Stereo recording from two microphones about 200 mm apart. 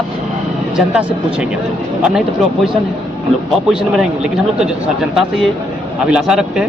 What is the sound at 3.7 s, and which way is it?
Speech, 5° right (ahead or behind).